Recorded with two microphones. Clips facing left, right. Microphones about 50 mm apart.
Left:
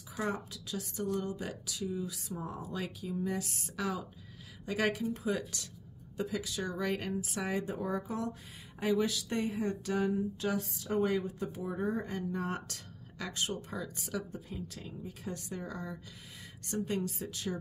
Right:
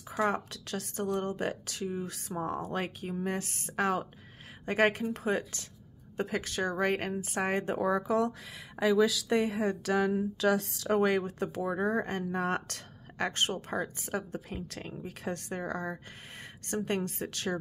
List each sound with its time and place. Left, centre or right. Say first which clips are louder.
0.1 s a woman's voice: right 6 dB; right
0.5 s a woman's voice: right 3 dB; right
7.8 s speech: right 7 dB; right
12.1 s a woman's voice: right 5 dB; right
13.9 s speech: right 3 dB; right
14.3 s a woman's voice: right 4 dB; right